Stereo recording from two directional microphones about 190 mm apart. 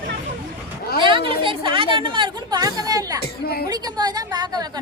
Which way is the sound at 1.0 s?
25° right (ahead or behind).